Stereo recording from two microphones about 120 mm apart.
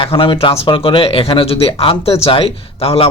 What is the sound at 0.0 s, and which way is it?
Speech, 45° left (ahead or behind).